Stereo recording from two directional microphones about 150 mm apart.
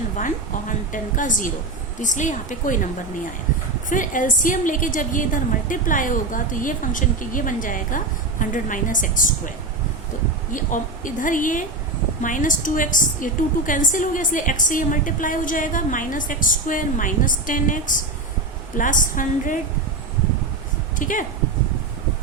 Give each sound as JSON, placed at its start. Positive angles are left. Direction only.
{"t": 0.7, "sound": "a woman's voice", "side_deg": 60}
{"t": 3.8, "sound": "a woman's voice", "side_deg": 60}
{"t": 10.5, "sound": "a woman's voice", "side_deg": 60}
{"t": 21.0, "sound": "a woman's voice", "side_deg": 60}